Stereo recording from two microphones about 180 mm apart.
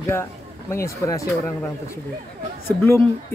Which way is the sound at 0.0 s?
15° left (ahead or behind).